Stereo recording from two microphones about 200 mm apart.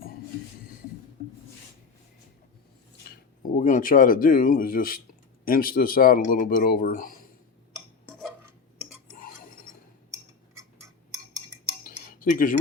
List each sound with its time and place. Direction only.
3.6 s speech: 40° left (ahead or behind)
11.8 s cutlery: 45° left (ahead or behind)